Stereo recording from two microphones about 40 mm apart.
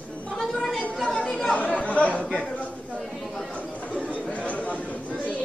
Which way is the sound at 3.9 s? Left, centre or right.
Left.